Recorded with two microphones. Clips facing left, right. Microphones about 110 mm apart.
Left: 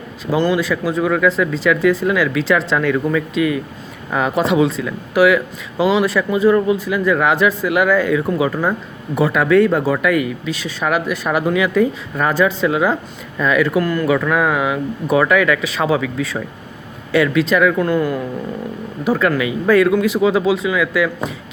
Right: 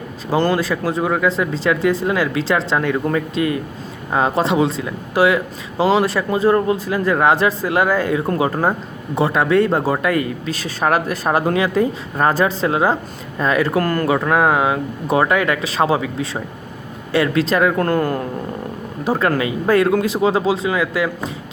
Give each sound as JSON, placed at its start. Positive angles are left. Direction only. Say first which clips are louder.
{"t": 0.3, "sound": "speech", "louder": "left 1 dB", "side_deg": -40}
{"t": 9.1, "sound": "speech", "louder": "left 2 dB", "side_deg": -30}
{"t": 14.1, "sound": "speech", "louder": "right 2 dB", "side_deg": -35}
{"t": 17.7, "sound": "speech", "louder": "left 1 dB", "side_deg": -45}
{"t": 19.0, "sound": "speech", "louder": "left 1 dB", "side_deg": -35}